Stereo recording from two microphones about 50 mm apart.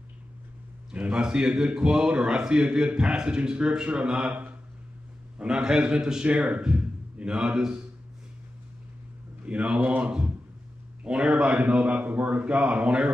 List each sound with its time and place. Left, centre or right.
1.1 s a man's voice: centre
5.4 s a man's voice: centre
6.2 s a man's voice: right
9.4 s a man's voice: right